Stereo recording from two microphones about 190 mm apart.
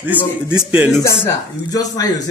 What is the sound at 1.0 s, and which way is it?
Speech, 15° left (ahead or behind).